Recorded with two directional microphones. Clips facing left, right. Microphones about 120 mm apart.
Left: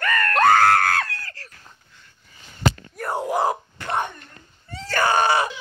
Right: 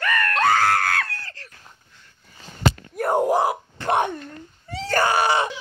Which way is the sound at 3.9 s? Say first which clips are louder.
Right 5 dB; 65° right (ahead or behind).